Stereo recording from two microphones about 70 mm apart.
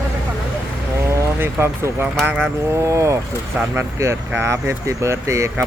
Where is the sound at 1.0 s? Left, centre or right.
Right.